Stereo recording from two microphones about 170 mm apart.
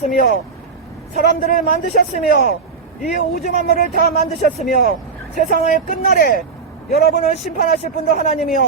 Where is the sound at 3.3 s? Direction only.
55° left (ahead or behind).